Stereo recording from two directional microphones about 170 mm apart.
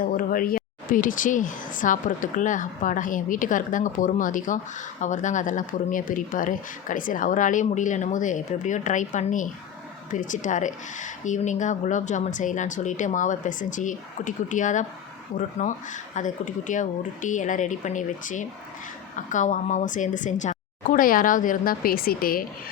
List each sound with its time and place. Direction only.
0.1 s speech: 55° left (ahead or behind)